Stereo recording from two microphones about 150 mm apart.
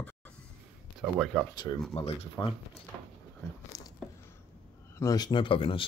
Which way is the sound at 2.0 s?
40° left (ahead or behind).